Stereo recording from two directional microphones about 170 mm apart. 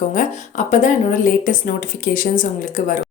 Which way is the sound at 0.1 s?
50° left (ahead or behind).